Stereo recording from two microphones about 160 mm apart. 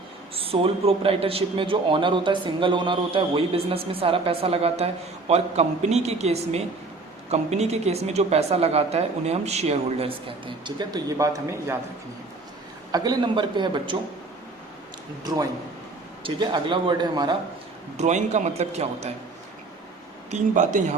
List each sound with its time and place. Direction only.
0.3 s a man's voice: 35° right (ahead or behind); by 11.8 s 20° right (ahead or behind)
12.9 s a man's voice: 25° right (ahead or behind)
15.2 s a man's voice: 25° right (ahead or behind)
17.9 s a man's voice: 45° right (ahead or behind)
20.3 s a man's voice: 50° right (ahead or behind)